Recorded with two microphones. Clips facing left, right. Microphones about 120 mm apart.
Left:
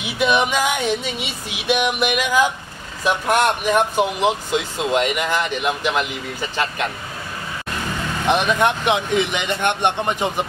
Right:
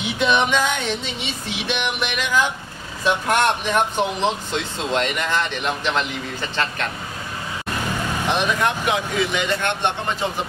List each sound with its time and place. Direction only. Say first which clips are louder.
0.2 s speech: left 1 dB; 10° left (ahead or behind)
8.5 s speech: left 3 dB; 20° left (ahead or behind)